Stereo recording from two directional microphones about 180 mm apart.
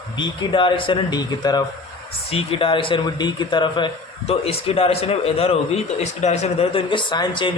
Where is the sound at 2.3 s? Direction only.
35° left (ahead or behind).